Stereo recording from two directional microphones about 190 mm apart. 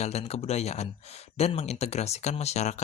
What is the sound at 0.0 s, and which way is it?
Speech, 35° left (ahead or behind).